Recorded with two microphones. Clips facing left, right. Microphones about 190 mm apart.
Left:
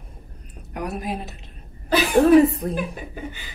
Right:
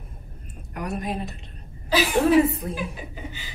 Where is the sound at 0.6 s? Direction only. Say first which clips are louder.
Left 1 dB; centre (ahead or behind).